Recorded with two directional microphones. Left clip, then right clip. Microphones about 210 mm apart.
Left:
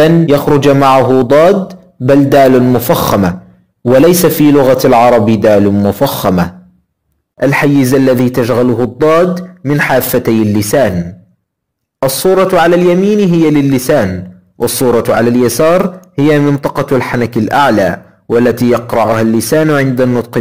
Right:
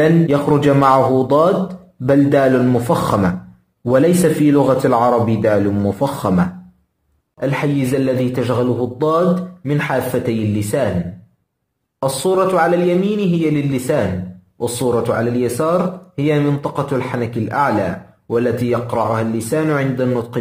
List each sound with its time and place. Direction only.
0.0 s a man's voice: 25° left (ahead or behind)
12.0 s a man's voice: 30° left (ahead or behind)